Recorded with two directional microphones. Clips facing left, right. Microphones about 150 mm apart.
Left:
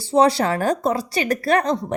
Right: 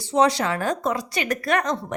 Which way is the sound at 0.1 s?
30° left (ahead or behind).